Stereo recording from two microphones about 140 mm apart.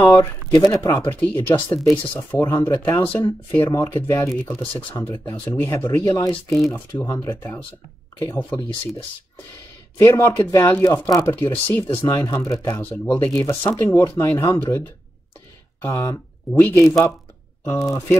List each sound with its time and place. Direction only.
0.1 s speech: 20° left (ahead or behind)
4.3 s speech: 10° left (ahead or behind); by 6.3 s 25° left (ahead or behind)
6.3 s speech: centre (ahead or behind)
6.7 s speech: 20° left (ahead or behind)
9.9 s speech: 20° left (ahead or behind)
15.8 s speech: 20° left (ahead or behind)